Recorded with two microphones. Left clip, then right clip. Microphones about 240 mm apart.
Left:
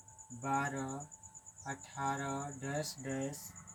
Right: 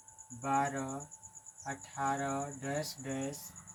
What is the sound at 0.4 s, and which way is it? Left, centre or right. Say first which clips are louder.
Speech: right 3 dB; centre.